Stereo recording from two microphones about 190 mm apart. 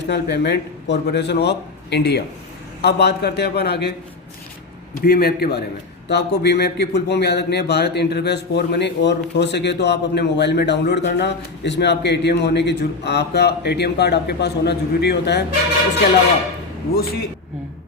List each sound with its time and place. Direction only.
0.1 s a man's voice: 65° left (ahead or behind)
4.9 s a man's voice: 55° left (ahead or behind)
16.9 s a man's voice: 55° left (ahead or behind)